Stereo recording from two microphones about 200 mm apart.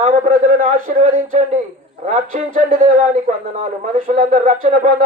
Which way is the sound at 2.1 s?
40° right (ahead or behind).